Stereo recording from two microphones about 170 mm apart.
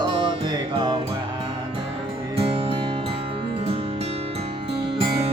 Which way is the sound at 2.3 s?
35° right (ahead or behind).